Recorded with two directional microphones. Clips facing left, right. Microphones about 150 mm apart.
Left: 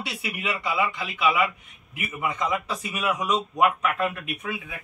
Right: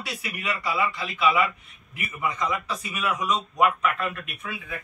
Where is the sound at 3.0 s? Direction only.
15° left (ahead or behind).